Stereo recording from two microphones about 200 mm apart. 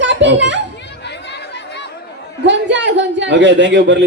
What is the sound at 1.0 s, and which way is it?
Chatter, 60° left (ahead or behind).